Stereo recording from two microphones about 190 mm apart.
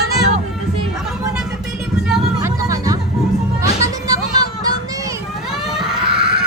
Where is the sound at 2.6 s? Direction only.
20° right (ahead or behind).